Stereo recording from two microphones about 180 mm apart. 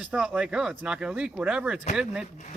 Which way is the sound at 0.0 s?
5° right (ahead or behind).